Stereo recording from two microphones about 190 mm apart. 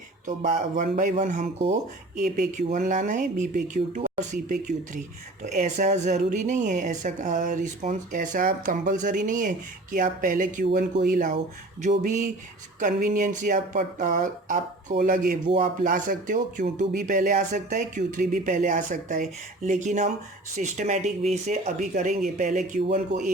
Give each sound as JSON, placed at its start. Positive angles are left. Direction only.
{"t": 0.3, "sound": "speech", "side_deg": -45}